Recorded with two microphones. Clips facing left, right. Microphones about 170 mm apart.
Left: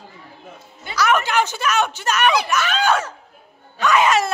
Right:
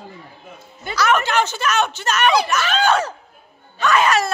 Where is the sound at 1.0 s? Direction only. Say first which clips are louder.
Even; 10° left (ahead or behind).